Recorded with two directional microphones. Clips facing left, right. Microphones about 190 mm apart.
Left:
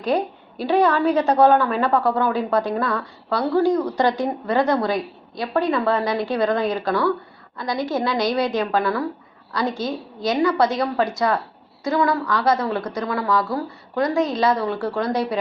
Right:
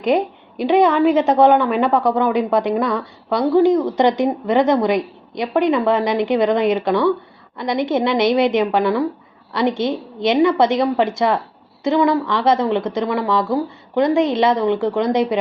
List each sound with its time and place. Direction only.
0.0 s a woman's voice: 20° right (ahead or behind)